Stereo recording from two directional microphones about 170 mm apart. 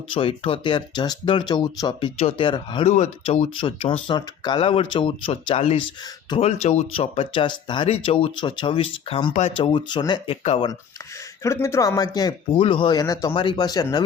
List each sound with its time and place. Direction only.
0.1 s speech: 30° left (ahead or behind)
11.4 s speech: 15° left (ahead or behind)